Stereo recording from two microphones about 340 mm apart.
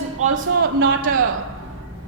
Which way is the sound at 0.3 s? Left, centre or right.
Right.